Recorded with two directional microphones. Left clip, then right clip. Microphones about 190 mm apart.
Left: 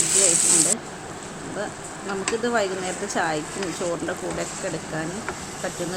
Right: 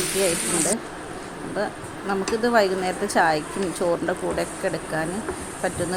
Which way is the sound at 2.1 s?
20° right (ahead or behind).